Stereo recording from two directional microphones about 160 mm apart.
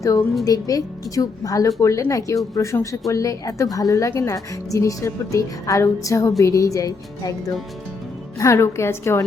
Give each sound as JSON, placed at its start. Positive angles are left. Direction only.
{"t": 0.0, "sound": "a woman's voice", "side_deg": 20}